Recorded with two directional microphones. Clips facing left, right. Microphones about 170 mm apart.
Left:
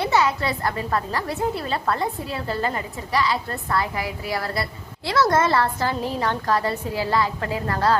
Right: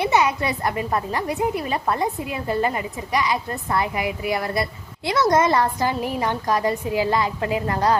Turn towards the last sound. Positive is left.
turn(degrees=-15)  # may be behind; listen again after turning